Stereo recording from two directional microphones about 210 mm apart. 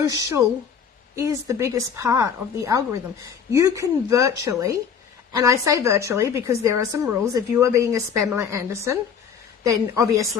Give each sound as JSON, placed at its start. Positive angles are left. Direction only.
{"t": 0.0, "sound": "a woman's voice", "side_deg": -15}